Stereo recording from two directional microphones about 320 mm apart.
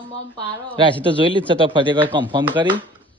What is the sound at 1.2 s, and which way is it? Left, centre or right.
Speech, centre.